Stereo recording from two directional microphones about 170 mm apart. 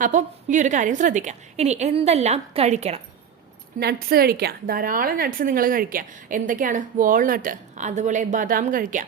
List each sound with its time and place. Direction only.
0.0 s a woman's voice: 50° right (ahead or behind)
3.8 s a woman's voice: 65° right (ahead or behind)